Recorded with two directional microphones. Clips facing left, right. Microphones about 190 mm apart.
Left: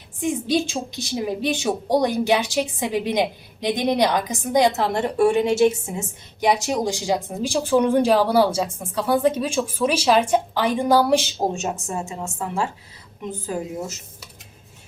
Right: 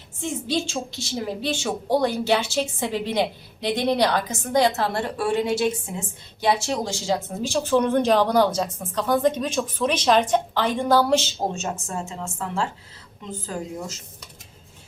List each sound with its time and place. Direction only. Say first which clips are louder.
0.2 s a woman's voice: left 4 dB; 15° left (ahead or behind)